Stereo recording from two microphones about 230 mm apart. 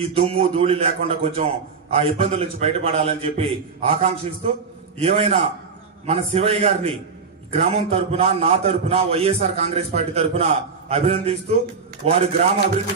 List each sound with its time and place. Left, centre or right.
0.0 s a man's voice: right